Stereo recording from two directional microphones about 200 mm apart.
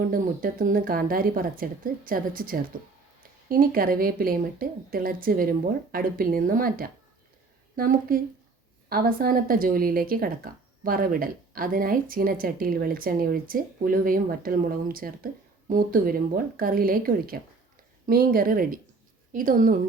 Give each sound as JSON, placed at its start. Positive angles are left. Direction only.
{"t": 0.0, "sound": "speech", "side_deg": -45}